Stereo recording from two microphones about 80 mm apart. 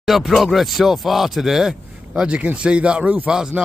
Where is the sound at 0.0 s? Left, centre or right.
Centre.